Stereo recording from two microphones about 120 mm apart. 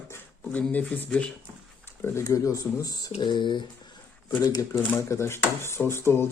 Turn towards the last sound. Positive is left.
turn(degrees=20)  # may be behind; listen again after turning